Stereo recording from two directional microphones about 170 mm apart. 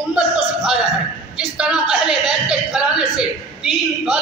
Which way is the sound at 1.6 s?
5° right (ahead or behind).